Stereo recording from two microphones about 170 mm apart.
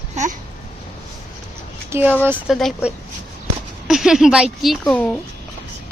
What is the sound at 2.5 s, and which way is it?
A woman's voice, centre (ahead or behind).